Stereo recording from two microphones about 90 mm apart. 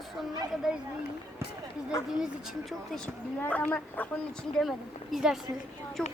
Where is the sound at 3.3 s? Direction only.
15° left (ahead or behind); by 5.5 s 5° right (ahead or behind).